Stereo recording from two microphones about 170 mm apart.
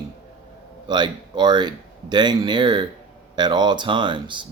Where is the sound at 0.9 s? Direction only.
25° right (ahead or behind).